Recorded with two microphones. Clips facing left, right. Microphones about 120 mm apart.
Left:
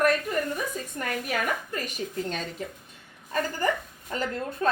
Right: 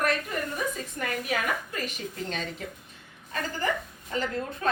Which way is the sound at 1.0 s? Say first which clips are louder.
Left 1 dB; 40° left (ahead or behind).